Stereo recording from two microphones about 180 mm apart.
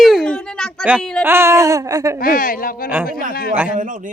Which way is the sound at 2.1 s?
50° left (ahead or behind).